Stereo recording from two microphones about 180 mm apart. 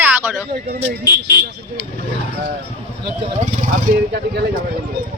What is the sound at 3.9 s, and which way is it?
Speech, 55° right (ahead or behind).